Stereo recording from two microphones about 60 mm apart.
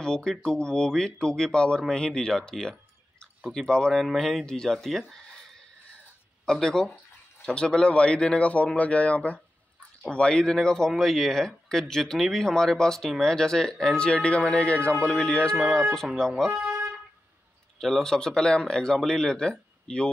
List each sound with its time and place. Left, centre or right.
0.0 s speech: centre
6.4 s speech: centre
17.7 s speech: centre